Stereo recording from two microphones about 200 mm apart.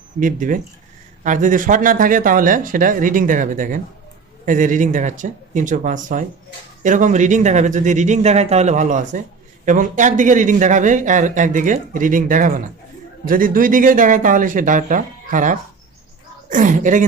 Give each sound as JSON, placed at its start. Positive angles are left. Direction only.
{"t": 0.2, "sound": "speech", "side_deg": -40}